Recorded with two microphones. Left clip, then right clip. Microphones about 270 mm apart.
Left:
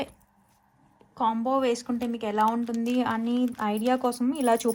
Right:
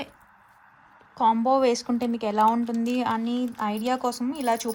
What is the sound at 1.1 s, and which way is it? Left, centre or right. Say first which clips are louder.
A woman's voice: right 4 dB; centre.